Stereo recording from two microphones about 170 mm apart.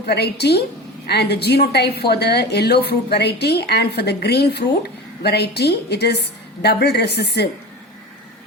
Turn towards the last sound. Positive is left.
turn(degrees=75)  # may be behind; listen again after turning